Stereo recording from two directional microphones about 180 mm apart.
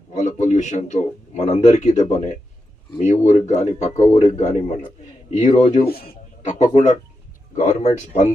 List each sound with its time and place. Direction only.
0.1 s speech: 40° left (ahead or behind)
5.9 s a man's voice: 60° left (ahead or behind)
6.4 s speech: 40° left (ahead or behind)